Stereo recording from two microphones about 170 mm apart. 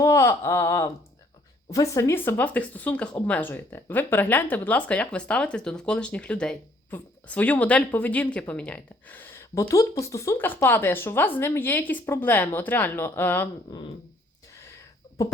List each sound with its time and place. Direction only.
0.0 s speech: 15° left (ahead or behind)